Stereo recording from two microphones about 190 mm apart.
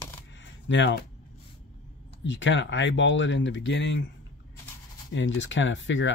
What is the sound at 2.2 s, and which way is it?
Speech, 75° left (ahead or behind).